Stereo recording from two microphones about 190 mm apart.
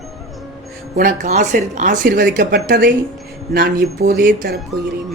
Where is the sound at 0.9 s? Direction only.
40° right (ahead or behind).